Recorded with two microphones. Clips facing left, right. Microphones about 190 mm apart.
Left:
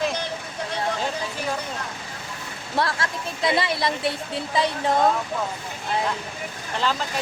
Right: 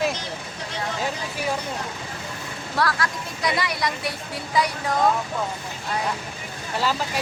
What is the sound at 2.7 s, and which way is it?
Speech, 25° left (ahead or behind).